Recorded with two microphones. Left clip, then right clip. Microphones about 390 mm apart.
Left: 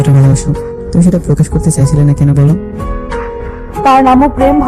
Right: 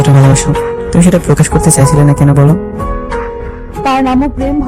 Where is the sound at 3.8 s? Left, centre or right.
Centre.